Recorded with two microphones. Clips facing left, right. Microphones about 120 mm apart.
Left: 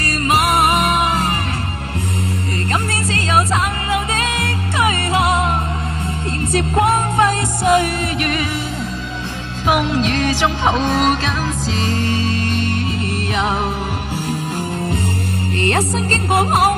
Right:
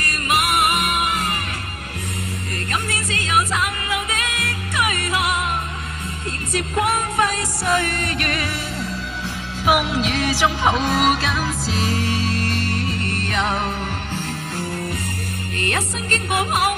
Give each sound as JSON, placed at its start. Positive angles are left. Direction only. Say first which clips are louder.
{"t": 0.0, "sound": "music", "louder": "left 5 dB", "side_deg": 35}
{"t": 2.7, "sound": "music", "louder": "left 4 dB", "side_deg": 35}
{"t": 6.7, "sound": "music", "louder": "left 4 dB", "side_deg": 30}
{"t": 8.0, "sound": "music", "louder": "left 4 dB", "side_deg": 0}
{"t": 9.7, "sound": "music", "louder": "left 3 dB", "side_deg": -5}
{"t": 15.6, "sound": "music", "louder": "left 7 dB", "side_deg": 35}